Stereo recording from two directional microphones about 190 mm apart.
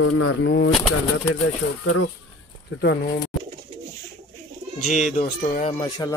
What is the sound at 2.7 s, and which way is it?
Speech, 55° left (ahead or behind).